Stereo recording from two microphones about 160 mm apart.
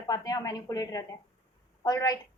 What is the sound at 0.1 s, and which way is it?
A woman's voice, 25° left (ahead or behind).